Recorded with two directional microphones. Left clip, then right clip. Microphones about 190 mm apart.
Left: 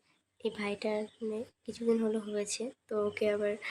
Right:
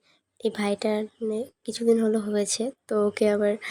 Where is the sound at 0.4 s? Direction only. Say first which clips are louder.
Right 9 dB; 30° right (ahead or behind).